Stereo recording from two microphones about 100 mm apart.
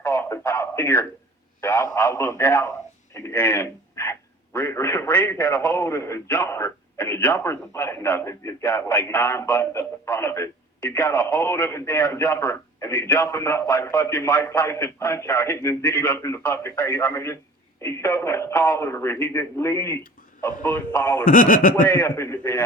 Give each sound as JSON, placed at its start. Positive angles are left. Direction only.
{"t": 0.0, "sound": "a man's voice", "side_deg": 25}